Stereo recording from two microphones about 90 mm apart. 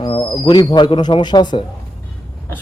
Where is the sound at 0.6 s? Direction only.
55° left (ahead or behind).